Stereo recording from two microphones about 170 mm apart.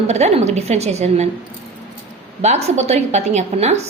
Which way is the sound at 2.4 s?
40° right (ahead or behind).